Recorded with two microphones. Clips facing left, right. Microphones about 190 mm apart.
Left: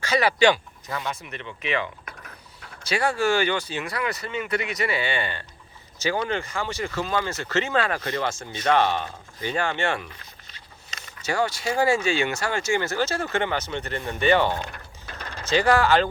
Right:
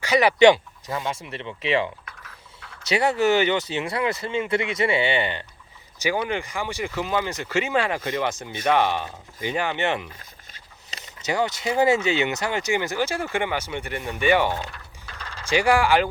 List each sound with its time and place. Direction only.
0.0 s speech: 15° right (ahead or behind)